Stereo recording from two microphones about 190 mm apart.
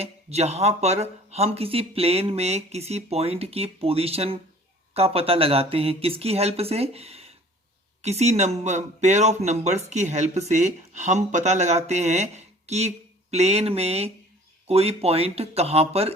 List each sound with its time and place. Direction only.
0.0 s speech: 35° right (ahead or behind)